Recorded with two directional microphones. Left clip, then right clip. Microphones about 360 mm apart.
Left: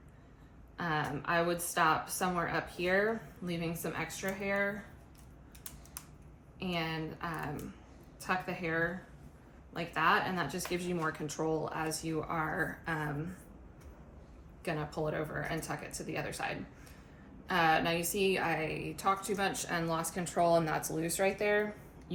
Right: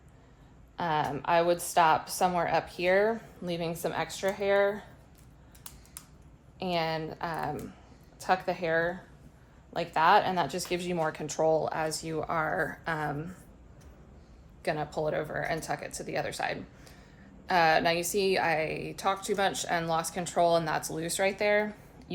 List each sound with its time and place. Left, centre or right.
0.8 s a woman's voice: centre
6.6 s a woman's voice: centre
14.6 s a woman's voice: centre